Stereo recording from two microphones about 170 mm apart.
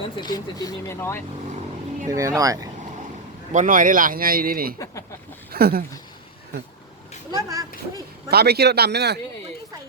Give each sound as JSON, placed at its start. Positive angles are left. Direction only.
{"t": 0.2, "sound": "speech", "side_deg": 25}
{"t": 2.0, "sound": "speech", "side_deg": -20}
{"t": 3.5, "sound": "speech", "side_deg": -50}
{"t": 5.5, "sound": "a sound", "side_deg": -65}
{"t": 7.3, "sound": "a sound", "side_deg": -20}
{"t": 8.3, "sound": "speech", "side_deg": -70}